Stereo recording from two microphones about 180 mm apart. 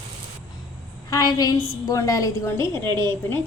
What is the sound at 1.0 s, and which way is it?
A woman's voice, 20° left (ahead or behind).